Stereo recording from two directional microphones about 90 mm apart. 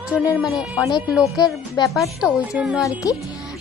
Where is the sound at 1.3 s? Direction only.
45° left (ahead or behind).